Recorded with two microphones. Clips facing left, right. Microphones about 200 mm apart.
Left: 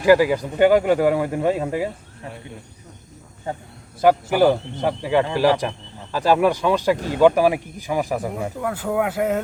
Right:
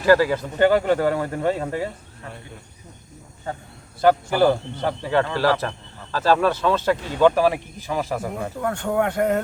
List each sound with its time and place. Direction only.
0.0 s speech: 15° left (ahead or behind)
3.5 s a man's voice: 20° left (ahead or behind)
8.6 s speech: 5° left (ahead or behind)